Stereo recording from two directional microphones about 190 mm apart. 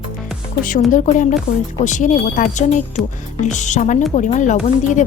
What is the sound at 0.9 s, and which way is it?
Speech, 45° left (ahead or behind).